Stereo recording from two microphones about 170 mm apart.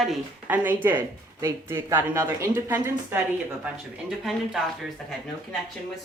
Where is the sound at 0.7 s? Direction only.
10° right (ahead or behind).